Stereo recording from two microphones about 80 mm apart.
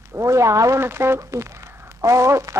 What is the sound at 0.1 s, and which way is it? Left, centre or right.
Speech, right.